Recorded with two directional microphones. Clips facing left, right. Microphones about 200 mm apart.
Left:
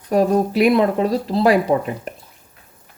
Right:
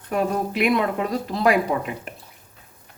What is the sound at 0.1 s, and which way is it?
Speech, 35° left (ahead or behind).